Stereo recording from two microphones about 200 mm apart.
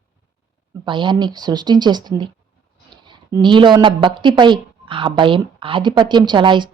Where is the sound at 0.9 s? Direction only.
25° right (ahead or behind).